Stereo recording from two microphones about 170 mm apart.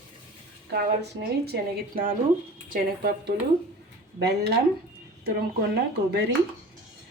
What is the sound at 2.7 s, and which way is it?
Speech, 65° right (ahead or behind).